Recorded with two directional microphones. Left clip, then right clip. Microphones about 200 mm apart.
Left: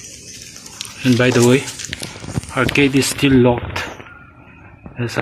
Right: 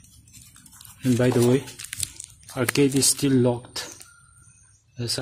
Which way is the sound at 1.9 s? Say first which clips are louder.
Left 3 dB; 50° right (ahead or behind).